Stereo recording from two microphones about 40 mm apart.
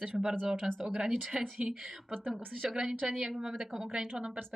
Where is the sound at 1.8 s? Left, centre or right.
Centre.